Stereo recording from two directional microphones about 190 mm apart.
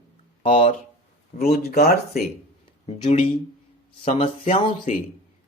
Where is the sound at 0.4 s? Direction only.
30° left (ahead or behind).